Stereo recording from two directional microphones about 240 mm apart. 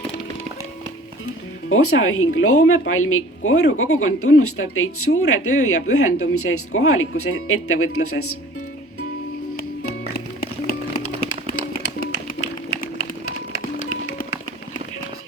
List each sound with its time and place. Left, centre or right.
1.7 s a woman's voice: left